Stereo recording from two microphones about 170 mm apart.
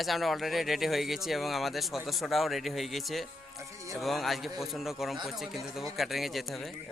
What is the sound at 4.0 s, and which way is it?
Speech, centre (ahead or behind).